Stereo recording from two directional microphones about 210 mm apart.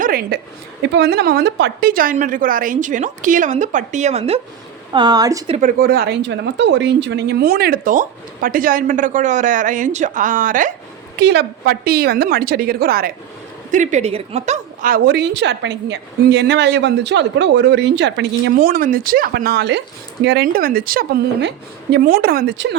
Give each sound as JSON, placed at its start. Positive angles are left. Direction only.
{"t": 0.0, "sound": "a sound", "side_deg": -45}
{"t": 0.8, "sound": "speech", "side_deg": -55}
{"t": 4.9, "sound": "a woman's voice", "side_deg": -20}
{"t": 5.5, "sound": "speech", "side_deg": -40}
{"t": 11.2, "sound": "a woman's voice", "side_deg": -55}